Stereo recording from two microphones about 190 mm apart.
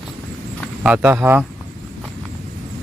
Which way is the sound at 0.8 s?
10° right (ahead or behind).